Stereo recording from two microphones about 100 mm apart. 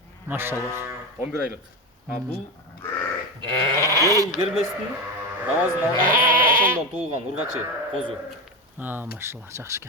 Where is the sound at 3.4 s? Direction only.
50° right (ahead or behind).